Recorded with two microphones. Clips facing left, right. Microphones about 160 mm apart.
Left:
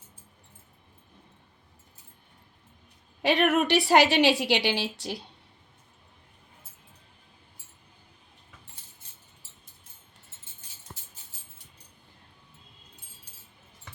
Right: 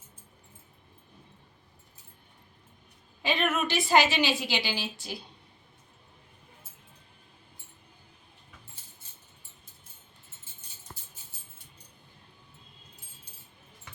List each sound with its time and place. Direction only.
3.2 s a woman's voice: 70° left (ahead or behind)